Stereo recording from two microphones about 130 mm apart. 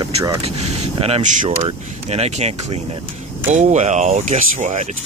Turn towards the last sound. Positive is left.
turn(degrees=-65)  # may be behind; listen again after turning